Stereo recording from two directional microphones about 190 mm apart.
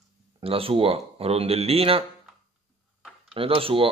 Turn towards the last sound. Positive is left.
turn(degrees=-30)  # may be behind; listen again after turning